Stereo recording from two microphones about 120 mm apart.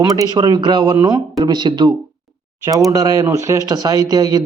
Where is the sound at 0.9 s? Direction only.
25° right (ahead or behind).